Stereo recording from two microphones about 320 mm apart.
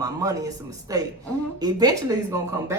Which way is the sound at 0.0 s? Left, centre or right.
Centre.